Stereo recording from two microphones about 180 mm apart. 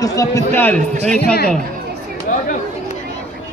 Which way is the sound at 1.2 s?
60° left (ahead or behind).